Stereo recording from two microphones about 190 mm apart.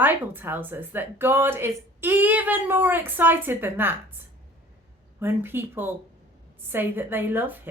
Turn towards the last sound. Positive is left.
turn(degrees=-10)  # may be behind; listen again after turning